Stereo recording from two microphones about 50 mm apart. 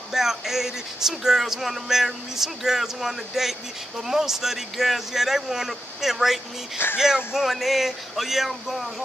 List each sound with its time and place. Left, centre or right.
0.1 s speech: centre
6.8 s speech: left
7.3 s speech: centre